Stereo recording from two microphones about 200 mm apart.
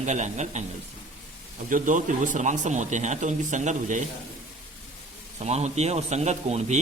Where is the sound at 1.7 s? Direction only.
40° right (ahead or behind).